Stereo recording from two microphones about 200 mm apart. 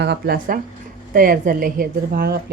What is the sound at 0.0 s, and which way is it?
A woman's voice, 55° right (ahead or behind).